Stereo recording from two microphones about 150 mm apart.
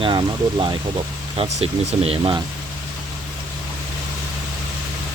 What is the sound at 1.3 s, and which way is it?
Speech, 40° right (ahead or behind).